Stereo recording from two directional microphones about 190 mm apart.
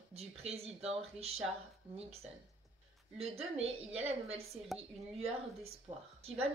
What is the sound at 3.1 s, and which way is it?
Speech, 30° right (ahead or behind).